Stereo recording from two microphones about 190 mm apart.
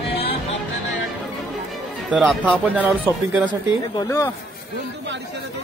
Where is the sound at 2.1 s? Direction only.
5° right (ahead or behind).